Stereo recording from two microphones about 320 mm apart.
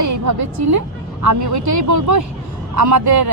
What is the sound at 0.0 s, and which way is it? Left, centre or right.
A woman's voice, right.